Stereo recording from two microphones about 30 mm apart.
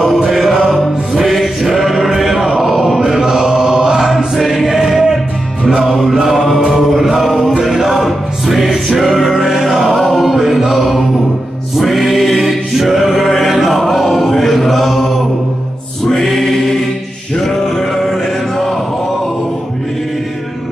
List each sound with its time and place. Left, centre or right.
0.2 s music: centre
1.8 s sheep: centre
3.0 s chant: centre
4.4 s choir: centre
4.7 s music: centre
5.9 s mantra: centre
7.0 s music: centre
12.2 s choir: centre
16.2 s choir: centre
17.4 s music: centre